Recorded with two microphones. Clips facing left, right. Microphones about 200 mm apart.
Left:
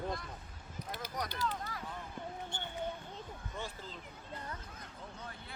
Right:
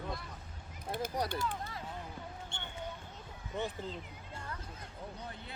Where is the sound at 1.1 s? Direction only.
30° right (ahead or behind).